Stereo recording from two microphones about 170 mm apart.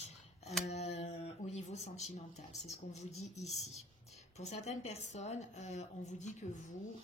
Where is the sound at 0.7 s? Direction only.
40° left (ahead or behind).